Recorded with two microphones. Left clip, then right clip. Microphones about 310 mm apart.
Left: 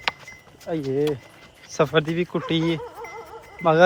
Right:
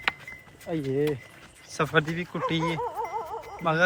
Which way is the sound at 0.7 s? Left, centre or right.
Centre.